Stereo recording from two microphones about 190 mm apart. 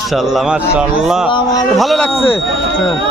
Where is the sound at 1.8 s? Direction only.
Centre (ahead or behind).